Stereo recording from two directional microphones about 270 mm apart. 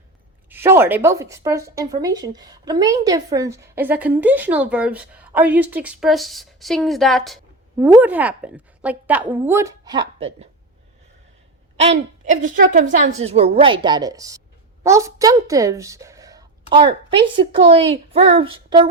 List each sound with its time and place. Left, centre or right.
0.5 s speech: centre
11.8 s a woman's voice: right